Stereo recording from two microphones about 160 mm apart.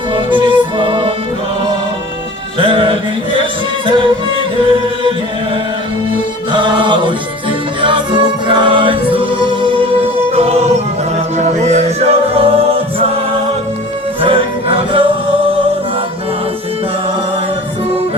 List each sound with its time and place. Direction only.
0.1 s music: 30° right (ahead or behind)
2.6 s music: 30° right (ahead or behind)
6.5 s music: 30° right (ahead or behind)
10.3 s music: 40° right (ahead or behind)
14.2 s music: 35° right (ahead or behind)